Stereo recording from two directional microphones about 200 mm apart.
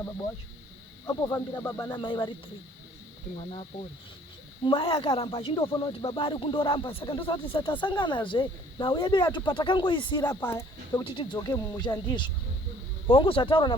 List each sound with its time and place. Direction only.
1.0 s speech: 15° left (ahead or behind)
3.3 s speech: 30° left (ahead or behind); by 11.0 s 10° left (ahead or behind)
11.0 s speech: 25° left (ahead or behind)